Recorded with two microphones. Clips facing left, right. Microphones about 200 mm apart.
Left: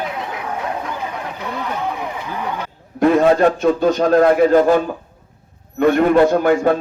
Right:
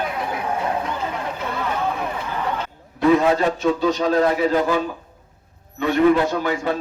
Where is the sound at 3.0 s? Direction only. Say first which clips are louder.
Left 4 dB; 50° left (ahead or behind).